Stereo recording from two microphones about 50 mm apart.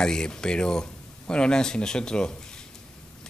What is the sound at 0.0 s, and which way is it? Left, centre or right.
Speech, centre.